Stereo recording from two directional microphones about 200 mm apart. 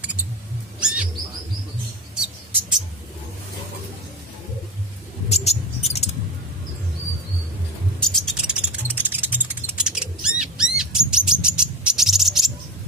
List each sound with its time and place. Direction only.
0.7 s bird: 5° right (ahead or behind)
5.3 s mouse: 30° left (ahead or behind)
8.0 s a sound: centre (ahead or behind)
10.8 s bird: 5° right (ahead or behind)